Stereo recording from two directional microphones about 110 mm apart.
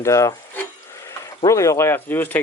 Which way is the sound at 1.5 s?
30° left (ahead or behind).